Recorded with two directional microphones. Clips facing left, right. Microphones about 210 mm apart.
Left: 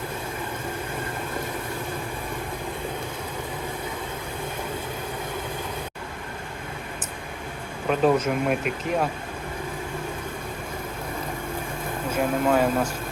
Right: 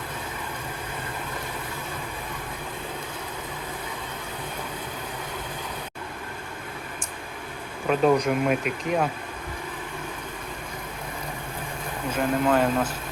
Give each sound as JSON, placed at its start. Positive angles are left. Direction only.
{"t": 7.9, "sound": "speech", "side_deg": 0}
{"t": 12.1, "sound": "speech", "side_deg": 10}